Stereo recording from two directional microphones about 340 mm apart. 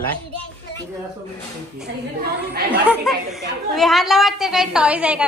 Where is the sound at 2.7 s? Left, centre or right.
Centre.